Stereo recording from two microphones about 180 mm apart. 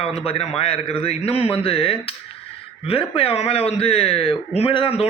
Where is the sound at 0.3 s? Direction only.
35° left (ahead or behind).